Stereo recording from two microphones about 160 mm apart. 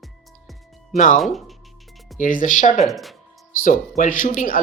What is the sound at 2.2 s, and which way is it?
Speech, 55° left (ahead or behind).